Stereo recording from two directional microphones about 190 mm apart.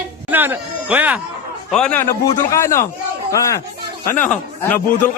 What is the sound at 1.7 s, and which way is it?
A man's voice, 5° left (ahead or behind).